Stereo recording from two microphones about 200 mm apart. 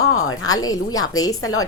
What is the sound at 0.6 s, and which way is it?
Speech, 20° left (ahead or behind).